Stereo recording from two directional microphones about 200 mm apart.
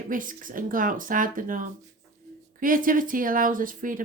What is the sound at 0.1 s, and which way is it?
Speech, 40° right (ahead or behind).